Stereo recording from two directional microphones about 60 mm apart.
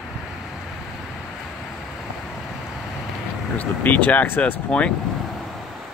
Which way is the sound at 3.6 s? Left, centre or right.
Left.